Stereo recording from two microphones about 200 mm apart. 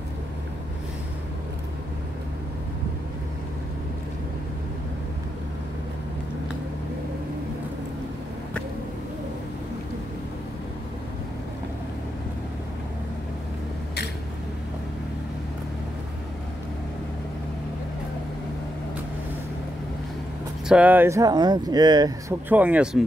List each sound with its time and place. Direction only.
20.6 s speech: 5° right (ahead or behind)
22.5 s speech: 5° right (ahead or behind)